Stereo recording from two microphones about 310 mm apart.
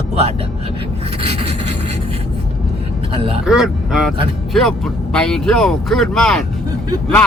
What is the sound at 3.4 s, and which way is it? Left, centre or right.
Speech, centre.